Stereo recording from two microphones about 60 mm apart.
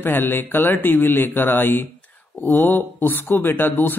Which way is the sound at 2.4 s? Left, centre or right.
Right.